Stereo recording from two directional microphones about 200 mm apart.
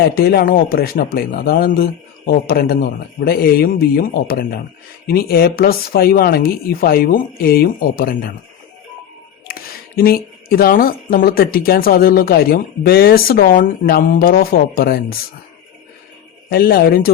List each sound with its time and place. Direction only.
0.0 s speech: 50° left (ahead or behind)
9.5 s speech: 50° left (ahead or behind)
16.5 s speech: 50° left (ahead or behind)